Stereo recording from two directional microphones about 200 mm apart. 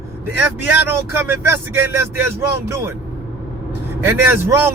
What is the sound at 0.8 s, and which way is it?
Speech, 10° right (ahead or behind).